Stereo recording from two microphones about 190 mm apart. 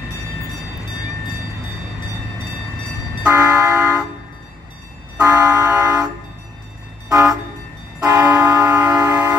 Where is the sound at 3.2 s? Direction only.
15° right (ahead or behind).